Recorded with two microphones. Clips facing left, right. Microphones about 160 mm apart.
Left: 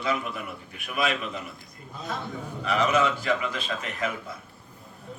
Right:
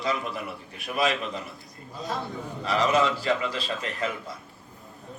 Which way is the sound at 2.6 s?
35° right (ahead or behind).